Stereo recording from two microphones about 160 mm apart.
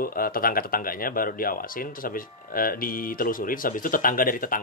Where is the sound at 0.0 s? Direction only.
65° left (ahead or behind).